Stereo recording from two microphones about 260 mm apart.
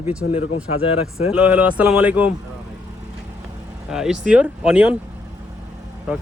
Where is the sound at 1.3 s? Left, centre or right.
Centre.